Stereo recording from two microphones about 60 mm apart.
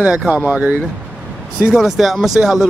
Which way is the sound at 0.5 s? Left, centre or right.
Right.